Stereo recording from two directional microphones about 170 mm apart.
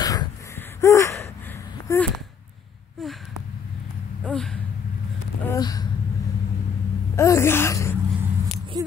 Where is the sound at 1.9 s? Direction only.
15° left (ahead or behind).